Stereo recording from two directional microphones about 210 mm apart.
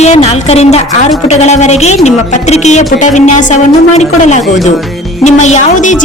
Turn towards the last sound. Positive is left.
turn(degrees=35)  # may be behind; listen again after turning